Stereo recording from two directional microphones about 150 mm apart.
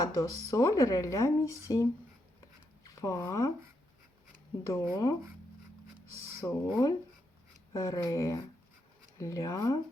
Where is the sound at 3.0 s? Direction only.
20° left (ahead or behind).